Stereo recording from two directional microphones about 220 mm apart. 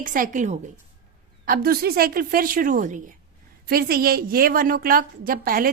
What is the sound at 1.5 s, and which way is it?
A woman's voice, 45° right (ahead or behind).